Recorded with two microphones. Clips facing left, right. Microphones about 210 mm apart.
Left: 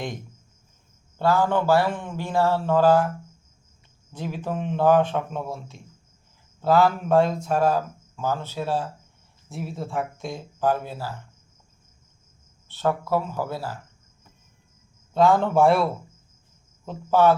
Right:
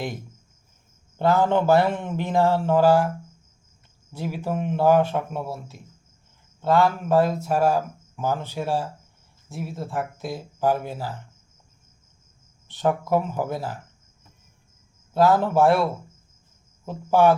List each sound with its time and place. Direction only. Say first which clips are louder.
1.2 s speech: right 2 dB; 20° right (ahead or behind)
4.1 s speech: right 2 dB; 10° right (ahead or behind)
9.5 s speech: even; centre (ahead or behind)
12.6 s speech: right 1 dB; 15° right (ahead or behind)
15.1 s speech: even; 5° right (ahead or behind)